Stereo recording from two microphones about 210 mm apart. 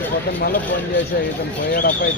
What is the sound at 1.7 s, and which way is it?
Speech, 40° left (ahead or behind).